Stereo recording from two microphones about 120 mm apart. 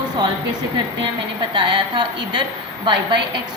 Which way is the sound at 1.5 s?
40° right (ahead or behind).